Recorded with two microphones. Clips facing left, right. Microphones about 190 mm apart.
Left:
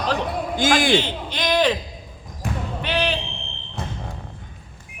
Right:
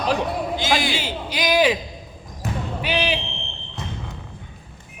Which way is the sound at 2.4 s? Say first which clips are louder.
Even; 10° right (ahead or behind).